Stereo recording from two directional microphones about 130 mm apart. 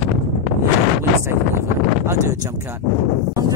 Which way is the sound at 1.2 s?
20° right (ahead or behind).